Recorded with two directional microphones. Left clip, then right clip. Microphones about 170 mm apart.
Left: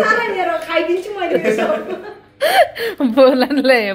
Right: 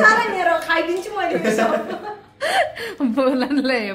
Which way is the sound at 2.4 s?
20° left (ahead or behind).